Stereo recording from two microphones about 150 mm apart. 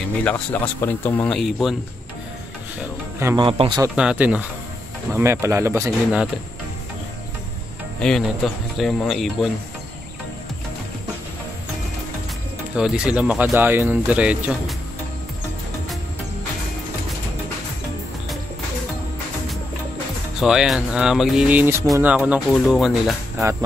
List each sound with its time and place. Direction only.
0.2 s speech: 10° left (ahead or behind)
1.4 s speech: centre (ahead or behind)
3.3 s a man's voice: 35° right (ahead or behind)
3.9 s speech: 5° right (ahead or behind)
5.8 s speech: 5° right (ahead or behind)
8.0 s speech: 5° left (ahead or behind)
12.7 s speech: 5° right (ahead or behind)
20.3 s speech: 5° right (ahead or behind)